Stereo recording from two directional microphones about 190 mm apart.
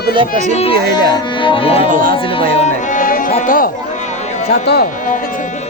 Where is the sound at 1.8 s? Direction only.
45° right (ahead or behind).